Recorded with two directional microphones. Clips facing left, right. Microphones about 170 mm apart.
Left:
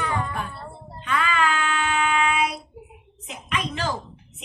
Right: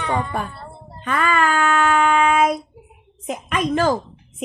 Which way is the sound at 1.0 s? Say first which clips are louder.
Right 4 dB; 50° right (ahead or behind).